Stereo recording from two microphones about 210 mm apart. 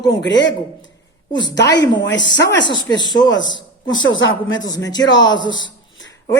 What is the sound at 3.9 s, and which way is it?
Speech, 65° left (ahead or behind).